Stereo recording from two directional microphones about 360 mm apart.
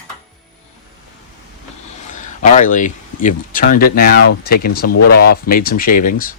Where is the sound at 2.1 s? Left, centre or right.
Left.